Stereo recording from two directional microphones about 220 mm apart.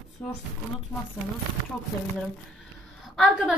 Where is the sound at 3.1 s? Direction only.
Centre (ahead or behind).